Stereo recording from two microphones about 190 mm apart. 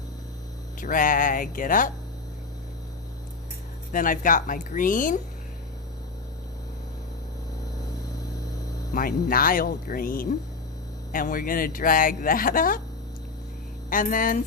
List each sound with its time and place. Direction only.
0.8 s speech: 45° left (ahead or behind)
3.9 s speech: 45° left (ahead or behind)
9.0 s speech: 50° left (ahead or behind)
13.9 s speech: 45° left (ahead or behind)